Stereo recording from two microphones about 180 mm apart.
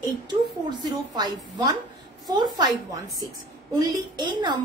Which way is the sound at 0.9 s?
25° right (ahead or behind).